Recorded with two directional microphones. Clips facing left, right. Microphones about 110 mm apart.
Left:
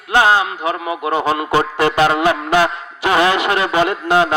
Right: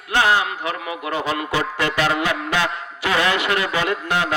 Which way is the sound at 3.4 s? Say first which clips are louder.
Left 6 dB; 25° left (ahead or behind).